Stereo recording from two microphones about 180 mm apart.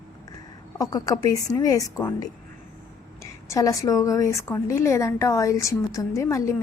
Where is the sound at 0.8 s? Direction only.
20° left (ahead or behind).